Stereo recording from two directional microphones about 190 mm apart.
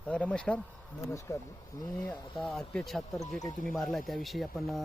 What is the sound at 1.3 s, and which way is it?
Speech, 15° left (ahead or behind).